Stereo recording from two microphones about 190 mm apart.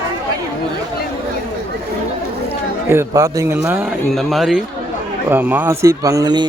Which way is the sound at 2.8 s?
15° right (ahead or behind).